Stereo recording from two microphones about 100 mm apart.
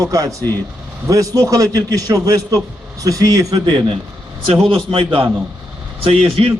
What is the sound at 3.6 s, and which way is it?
Speech, 60° right (ahead or behind).